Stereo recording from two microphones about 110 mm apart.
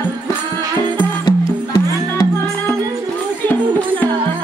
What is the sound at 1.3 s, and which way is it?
Music, 50° left (ahead or behind).